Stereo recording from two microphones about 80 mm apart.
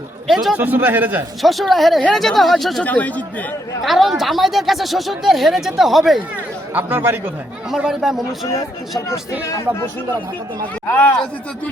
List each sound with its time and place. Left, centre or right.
0.5 s a man's voice: right
1.4 s speech: centre
2.8 s speech: centre
3.8 s speech: centre
6.7 s a man's voice: right
7.9 s speech: centre
10.8 s speech: left